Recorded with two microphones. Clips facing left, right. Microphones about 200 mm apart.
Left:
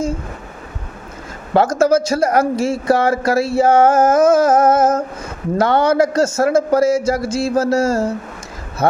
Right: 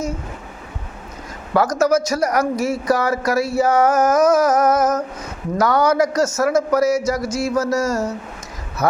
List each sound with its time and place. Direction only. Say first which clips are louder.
1.5 s speech: left 3 dB; 25° left (ahead or behind)